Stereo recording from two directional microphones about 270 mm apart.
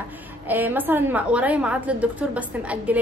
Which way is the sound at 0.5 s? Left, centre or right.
Centre.